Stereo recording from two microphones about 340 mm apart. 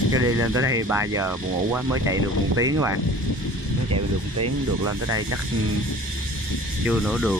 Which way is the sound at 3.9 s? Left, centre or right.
Right.